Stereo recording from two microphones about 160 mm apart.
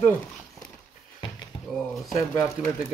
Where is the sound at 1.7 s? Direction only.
Centre (ahead or behind).